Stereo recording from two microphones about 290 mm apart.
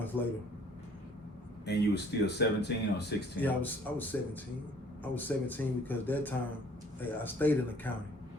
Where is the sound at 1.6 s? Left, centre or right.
Left.